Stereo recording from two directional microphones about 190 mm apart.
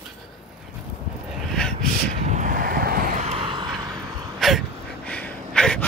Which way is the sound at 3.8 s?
20° right (ahead or behind).